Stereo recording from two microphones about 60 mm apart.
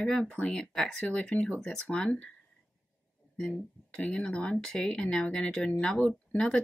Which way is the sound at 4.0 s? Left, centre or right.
Centre.